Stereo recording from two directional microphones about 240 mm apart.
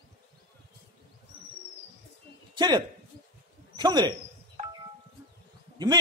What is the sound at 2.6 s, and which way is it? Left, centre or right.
A man's voice, centre.